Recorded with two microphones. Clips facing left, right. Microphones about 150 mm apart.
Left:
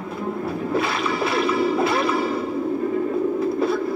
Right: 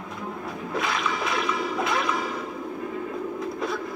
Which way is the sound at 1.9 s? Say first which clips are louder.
Left 6 dB; 30° left (ahead or behind).